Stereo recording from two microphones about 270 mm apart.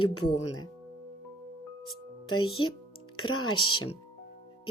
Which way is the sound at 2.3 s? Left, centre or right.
Centre.